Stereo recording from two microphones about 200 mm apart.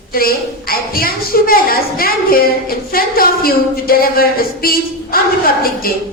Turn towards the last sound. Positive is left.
turn(degrees=50)  # may be behind; listen again after turning